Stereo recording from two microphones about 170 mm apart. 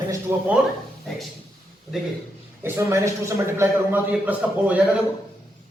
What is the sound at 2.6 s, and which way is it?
A man's voice, 15° right (ahead or behind).